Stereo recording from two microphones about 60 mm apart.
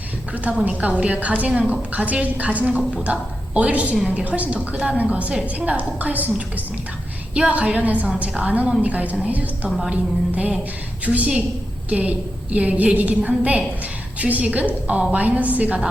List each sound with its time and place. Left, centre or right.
0.6 s a woman's voice: right
9.6 s a woman's voice: centre
9.9 s a woman's voice: right